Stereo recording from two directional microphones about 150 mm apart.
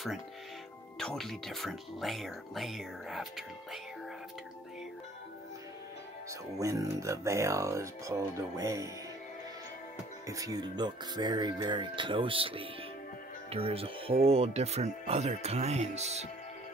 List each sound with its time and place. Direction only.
0.9 s speech: centre (ahead or behind)
6.6 s speech: 20° right (ahead or behind)
10.2 s speech: 25° right (ahead or behind); by 16.3 s 45° right (ahead or behind)